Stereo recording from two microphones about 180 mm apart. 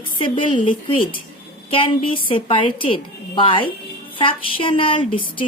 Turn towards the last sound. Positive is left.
turn(degrees=30)  # may be behind; listen again after turning